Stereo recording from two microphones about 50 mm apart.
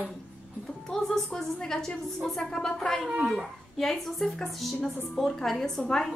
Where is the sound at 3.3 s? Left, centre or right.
Centre.